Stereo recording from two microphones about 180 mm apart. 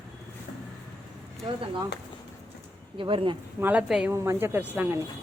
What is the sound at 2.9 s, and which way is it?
Speech, 30° right (ahead or behind).